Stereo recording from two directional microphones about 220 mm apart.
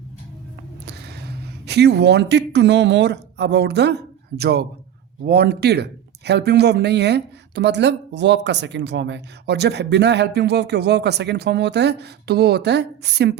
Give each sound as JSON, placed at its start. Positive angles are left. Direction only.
{"t": 0.9, "sound": "speech", "side_deg": -50}